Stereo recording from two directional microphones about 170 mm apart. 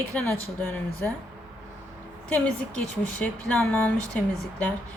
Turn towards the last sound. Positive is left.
turn(degrees=10)  # may be behind; listen again after turning